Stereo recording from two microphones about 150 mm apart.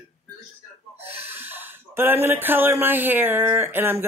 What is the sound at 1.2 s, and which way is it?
Speech, 15° right (ahead or behind).